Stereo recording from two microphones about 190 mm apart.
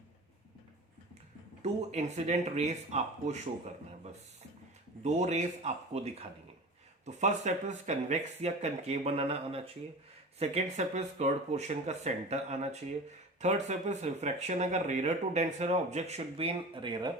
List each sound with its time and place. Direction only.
1.6 s speech: 35° right (ahead or behind)
5.0 s speech: 35° right (ahead or behind)